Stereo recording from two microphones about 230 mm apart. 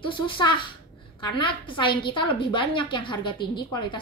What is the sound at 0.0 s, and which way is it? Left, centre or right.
A woman's voice, left.